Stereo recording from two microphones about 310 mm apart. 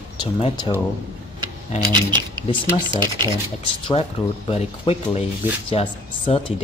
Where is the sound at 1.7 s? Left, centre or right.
Left.